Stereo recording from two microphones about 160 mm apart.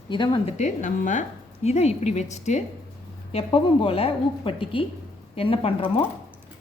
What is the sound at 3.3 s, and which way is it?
A woman's voice, 35° left (ahead or behind).